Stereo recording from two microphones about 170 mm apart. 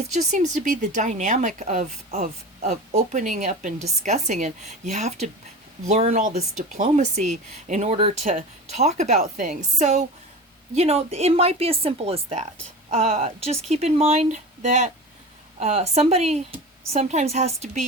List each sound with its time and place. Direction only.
0.1 s speech: 45° right (ahead or behind)
5.9 s speech: 40° right (ahead or behind)